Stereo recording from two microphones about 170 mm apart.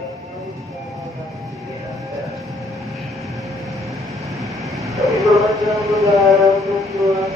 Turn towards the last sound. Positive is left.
turn(degrees=0)  # may be behind; listen again after turning